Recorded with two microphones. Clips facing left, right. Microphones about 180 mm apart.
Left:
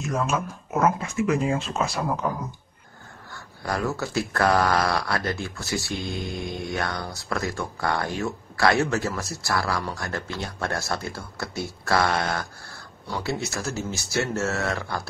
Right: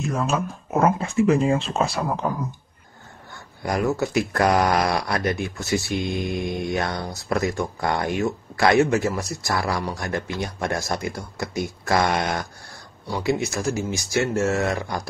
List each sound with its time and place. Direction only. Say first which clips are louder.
0.3 s speech: right 3 dB; 30° right (ahead or behind)
3.3 s speech: right 4 dB; 20° right (ahead or behind)